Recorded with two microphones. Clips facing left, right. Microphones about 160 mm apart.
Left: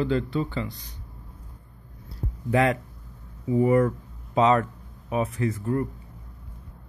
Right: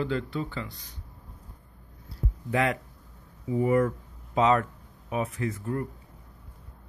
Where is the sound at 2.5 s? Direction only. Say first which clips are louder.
Left 4 dB; 35° left (ahead or behind).